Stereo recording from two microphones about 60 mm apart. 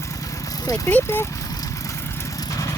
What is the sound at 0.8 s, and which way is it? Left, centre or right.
Speech, left.